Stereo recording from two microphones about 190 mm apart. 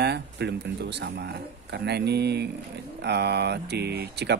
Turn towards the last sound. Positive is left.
turn(degrees=-60)  # may be behind; listen again after turning